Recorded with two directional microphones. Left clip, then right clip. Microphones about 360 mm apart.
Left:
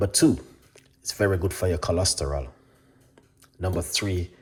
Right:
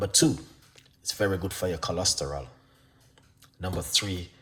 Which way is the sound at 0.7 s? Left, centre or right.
Centre.